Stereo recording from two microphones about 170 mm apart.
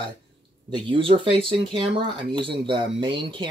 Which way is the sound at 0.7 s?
30° right (ahead or behind).